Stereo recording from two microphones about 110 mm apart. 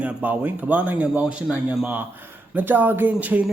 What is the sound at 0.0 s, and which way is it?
A man's voice, 15° right (ahead or behind).